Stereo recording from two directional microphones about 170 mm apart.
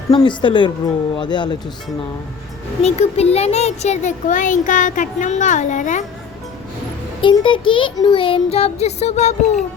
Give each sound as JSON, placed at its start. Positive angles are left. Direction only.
{"t": 0.1, "sound": "a woman's voice", "side_deg": 30}
{"t": 2.8, "sound": "a child's voice", "side_deg": 40}
{"t": 7.2, "sound": "child singing", "side_deg": 30}